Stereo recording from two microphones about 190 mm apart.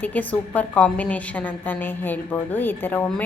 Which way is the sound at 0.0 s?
10° left (ahead or behind).